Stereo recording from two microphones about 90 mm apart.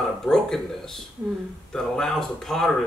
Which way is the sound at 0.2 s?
5° left (ahead or behind).